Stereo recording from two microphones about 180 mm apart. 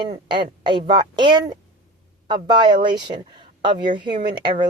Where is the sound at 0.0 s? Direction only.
25° right (ahead or behind).